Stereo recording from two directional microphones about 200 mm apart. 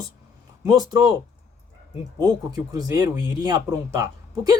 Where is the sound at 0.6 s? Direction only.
20° right (ahead or behind).